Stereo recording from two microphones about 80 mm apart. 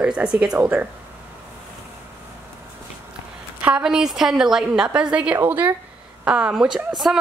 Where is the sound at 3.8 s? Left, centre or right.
Centre.